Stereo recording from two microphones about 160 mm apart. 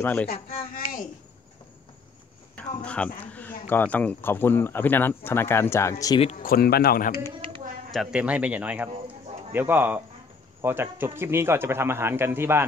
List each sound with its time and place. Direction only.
0.0 s speech: 10° left (ahead or behind)
0.6 s a sound: 60° left (ahead or behind)
2.5 s speech: 10° left (ahead or behind)
6.3 s speech: 65° left (ahead or behind)
7.9 s a man's voice: 5° right (ahead or behind)